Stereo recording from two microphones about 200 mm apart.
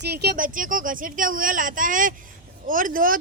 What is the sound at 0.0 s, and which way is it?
Speech, 55° right (ahead or behind).